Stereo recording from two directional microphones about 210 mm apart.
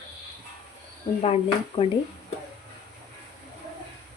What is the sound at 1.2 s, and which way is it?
Speech, 25° left (ahead or behind).